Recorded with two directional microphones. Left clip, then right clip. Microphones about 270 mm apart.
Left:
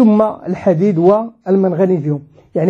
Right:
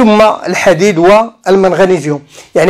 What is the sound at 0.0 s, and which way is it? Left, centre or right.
Speech, centre.